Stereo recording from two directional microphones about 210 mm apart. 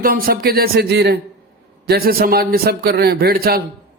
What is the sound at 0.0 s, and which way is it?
A man's voice, 45° right (ahead or behind).